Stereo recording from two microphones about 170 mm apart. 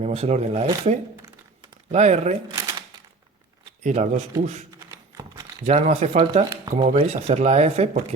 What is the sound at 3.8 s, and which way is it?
Speech, 40° right (ahead or behind).